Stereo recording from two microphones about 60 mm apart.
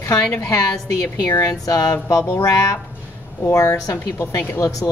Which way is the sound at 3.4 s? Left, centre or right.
Left.